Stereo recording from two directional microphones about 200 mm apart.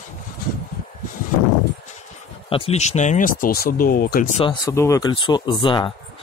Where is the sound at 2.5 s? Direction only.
30° left (ahead or behind).